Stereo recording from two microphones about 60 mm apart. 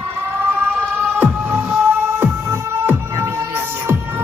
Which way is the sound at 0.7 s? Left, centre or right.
Right.